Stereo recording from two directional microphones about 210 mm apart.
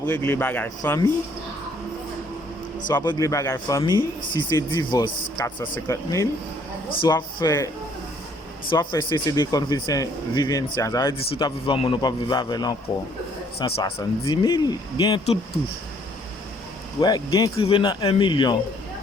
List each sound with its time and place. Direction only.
0.0 s speech: 10° left (ahead or behind)
2.9 s speech: 15° left (ahead or behind)
8.7 s speech: 20° left (ahead or behind)
17.0 s speech: 20° left (ahead or behind)